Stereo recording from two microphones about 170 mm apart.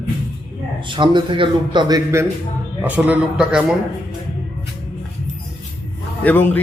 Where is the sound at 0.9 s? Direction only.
30° right (ahead or behind).